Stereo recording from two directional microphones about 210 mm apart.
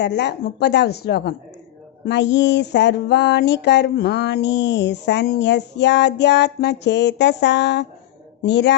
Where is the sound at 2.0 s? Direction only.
55° left (ahead or behind).